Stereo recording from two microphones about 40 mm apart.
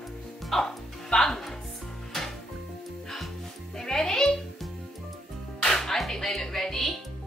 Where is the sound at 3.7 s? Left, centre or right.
Centre.